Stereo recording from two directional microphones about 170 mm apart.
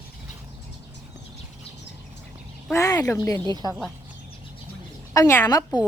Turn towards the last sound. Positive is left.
turn(degrees=20)  # may be behind; listen again after turning